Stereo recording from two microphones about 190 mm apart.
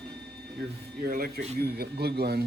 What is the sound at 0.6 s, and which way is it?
Speech, 50° right (ahead or behind).